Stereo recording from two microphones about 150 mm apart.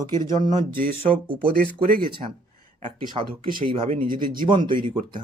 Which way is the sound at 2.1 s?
35° right (ahead or behind).